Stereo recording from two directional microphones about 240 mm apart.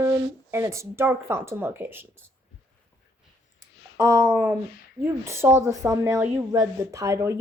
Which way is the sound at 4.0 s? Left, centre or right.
Centre.